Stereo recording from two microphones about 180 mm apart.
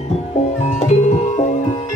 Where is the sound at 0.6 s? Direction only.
40° left (ahead or behind).